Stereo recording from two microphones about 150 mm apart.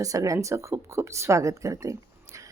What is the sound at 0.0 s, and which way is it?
A woman's voice, 20° right (ahead or behind).